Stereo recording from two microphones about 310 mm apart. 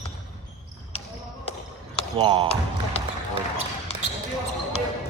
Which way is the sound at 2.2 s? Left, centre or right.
Centre.